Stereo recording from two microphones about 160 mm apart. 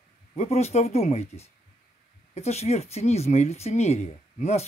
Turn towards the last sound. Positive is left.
turn(degrees=45)  # may be behind; listen again after turning